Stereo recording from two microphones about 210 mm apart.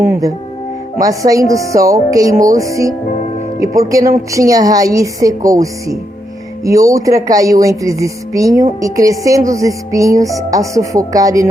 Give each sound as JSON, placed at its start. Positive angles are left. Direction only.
{"t": 0.0, "sound": "speech", "side_deg": -15}